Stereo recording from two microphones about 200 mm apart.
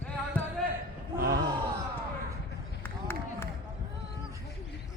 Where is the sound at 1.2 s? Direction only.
50° right (ahead or behind).